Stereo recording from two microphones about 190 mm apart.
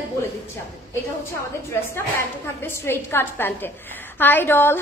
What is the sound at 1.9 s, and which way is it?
A woman's voice, 15° left (ahead or behind).